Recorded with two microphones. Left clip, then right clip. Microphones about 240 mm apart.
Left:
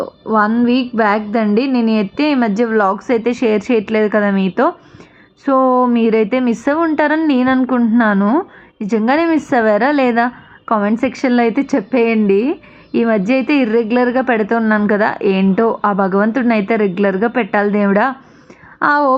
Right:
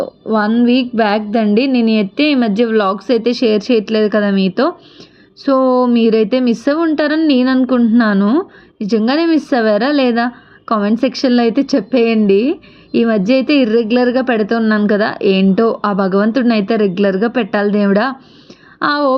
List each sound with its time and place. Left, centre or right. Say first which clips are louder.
0.0 s a woman's voice: left 1 dB; centre
2.5 s speech: right 1 dB; centre
2.9 s a woman's voice: right 1 dB; centre
5.5 s a woman's voice: even; centre